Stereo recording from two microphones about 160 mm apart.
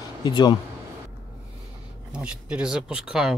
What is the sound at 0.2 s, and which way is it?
Speech, 25° left (ahead or behind).